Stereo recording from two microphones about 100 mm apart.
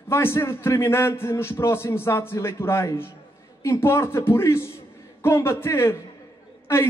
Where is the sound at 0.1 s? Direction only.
25° left (ahead or behind).